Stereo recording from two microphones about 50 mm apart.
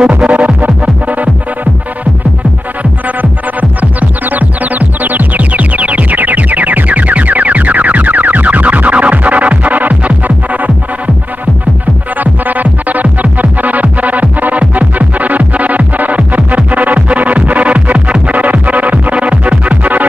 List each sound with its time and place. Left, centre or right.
0.2 s music: right
4.3 s music: right
12.2 s music: right